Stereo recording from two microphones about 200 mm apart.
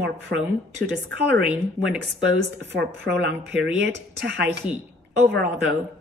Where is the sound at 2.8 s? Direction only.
55° right (ahead or behind).